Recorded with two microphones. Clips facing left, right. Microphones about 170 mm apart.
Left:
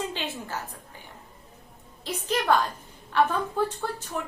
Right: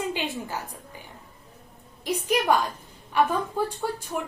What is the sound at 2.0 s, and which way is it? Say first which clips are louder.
A woman's voice: right 2 dB; 15° right (ahead or behind).